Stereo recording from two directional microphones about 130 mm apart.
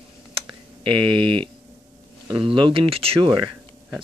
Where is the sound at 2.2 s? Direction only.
40° right (ahead or behind).